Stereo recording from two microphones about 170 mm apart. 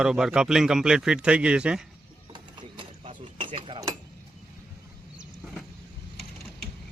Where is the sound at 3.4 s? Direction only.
30° right (ahead or behind).